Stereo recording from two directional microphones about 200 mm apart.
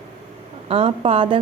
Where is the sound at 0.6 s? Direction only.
30° right (ahead or behind).